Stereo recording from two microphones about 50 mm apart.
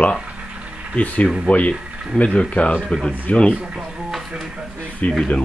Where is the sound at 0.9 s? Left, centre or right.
Left.